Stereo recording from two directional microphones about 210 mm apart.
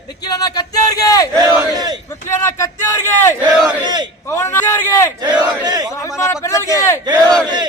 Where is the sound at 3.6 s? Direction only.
20° right (ahead or behind).